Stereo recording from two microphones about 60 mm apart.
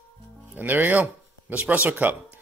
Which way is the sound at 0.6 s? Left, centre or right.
Right.